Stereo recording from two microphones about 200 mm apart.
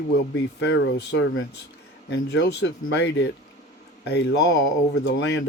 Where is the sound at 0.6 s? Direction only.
65° left (ahead or behind).